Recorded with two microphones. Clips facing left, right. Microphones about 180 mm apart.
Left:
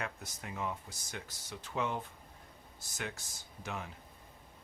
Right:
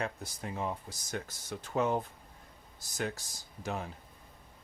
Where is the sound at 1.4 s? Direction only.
45° right (ahead or behind).